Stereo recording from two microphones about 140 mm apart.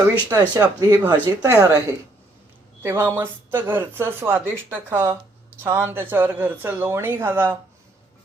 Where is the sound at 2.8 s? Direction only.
20° right (ahead or behind).